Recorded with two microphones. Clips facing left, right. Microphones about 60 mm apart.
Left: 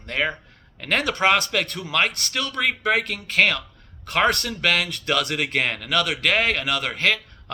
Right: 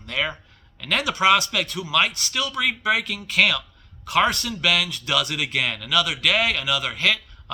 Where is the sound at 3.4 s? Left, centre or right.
Left.